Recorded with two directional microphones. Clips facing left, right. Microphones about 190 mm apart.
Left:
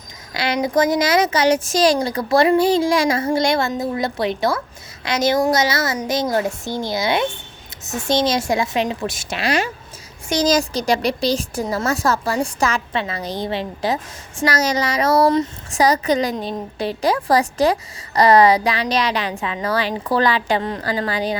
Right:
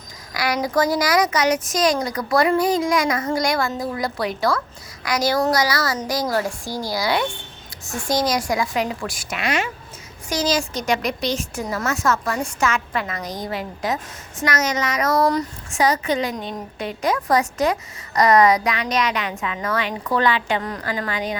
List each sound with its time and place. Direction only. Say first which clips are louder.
0.3 s a woman's voice: left 2 dB; 25° left (ahead or behind)
15.7 s a woman's voice: left 3 dB; 35° left (ahead or behind)